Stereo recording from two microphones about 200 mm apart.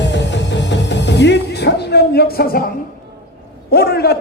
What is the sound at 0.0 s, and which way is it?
Music, 60° left (ahead or behind).